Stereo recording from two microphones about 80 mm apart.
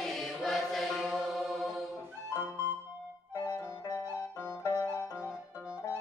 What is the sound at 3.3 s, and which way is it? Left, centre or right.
Music, left.